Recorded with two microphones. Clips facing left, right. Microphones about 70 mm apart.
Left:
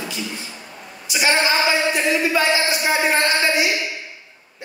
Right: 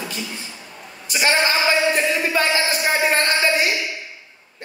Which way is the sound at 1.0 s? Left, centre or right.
Right.